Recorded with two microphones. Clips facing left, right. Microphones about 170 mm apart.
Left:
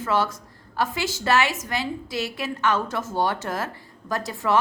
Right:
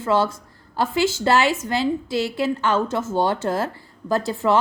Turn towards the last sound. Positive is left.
turn(degrees=-30)  # may be behind; listen again after turning